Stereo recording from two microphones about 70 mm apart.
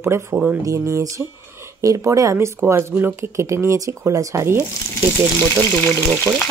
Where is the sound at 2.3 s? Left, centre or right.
Right.